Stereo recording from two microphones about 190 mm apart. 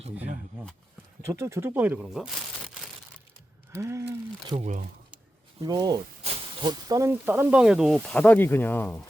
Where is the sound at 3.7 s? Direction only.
15° right (ahead or behind).